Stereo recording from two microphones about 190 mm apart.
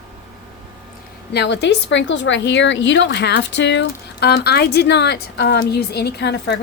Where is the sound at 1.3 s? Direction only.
65° left (ahead or behind).